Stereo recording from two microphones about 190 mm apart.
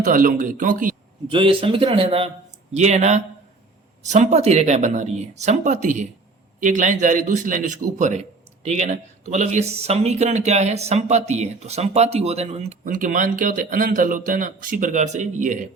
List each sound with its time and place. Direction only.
0.0 s speech: 45° right (ahead or behind)
1.3 s a man's voice: 25° right (ahead or behind)